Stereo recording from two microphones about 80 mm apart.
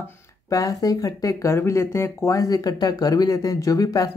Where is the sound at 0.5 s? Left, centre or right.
Left.